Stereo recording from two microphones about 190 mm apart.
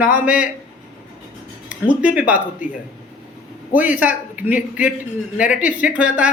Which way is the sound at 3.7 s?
10° right (ahead or behind).